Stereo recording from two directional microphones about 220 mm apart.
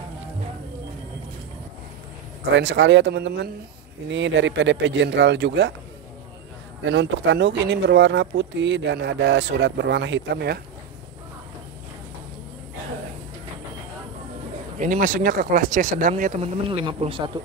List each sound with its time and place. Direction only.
2.5 s speech: 55° right (ahead or behind)
6.8 s speech: 55° right (ahead or behind)
14.8 s speech: 35° right (ahead or behind)
16.6 s speech: 20° right (ahead or behind)